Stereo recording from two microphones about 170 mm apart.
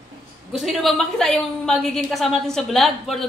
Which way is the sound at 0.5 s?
Centre (ahead or behind).